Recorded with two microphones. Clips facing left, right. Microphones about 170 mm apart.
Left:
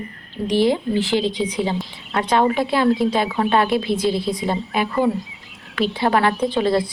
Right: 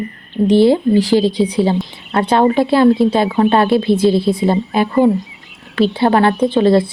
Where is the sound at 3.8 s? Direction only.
25° right (ahead or behind).